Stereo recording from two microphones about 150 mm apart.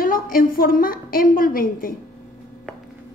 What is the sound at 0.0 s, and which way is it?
A woman's voice, 70° left (ahead or behind).